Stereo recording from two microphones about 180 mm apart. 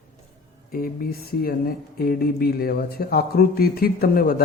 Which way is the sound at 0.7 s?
55° left (ahead or behind).